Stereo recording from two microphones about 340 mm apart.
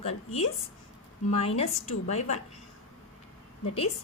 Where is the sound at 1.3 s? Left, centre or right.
Centre.